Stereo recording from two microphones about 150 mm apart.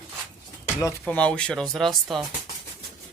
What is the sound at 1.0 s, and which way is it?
Speech, 10° left (ahead or behind).